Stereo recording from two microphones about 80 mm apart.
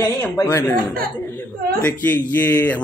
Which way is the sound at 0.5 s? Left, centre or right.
Left.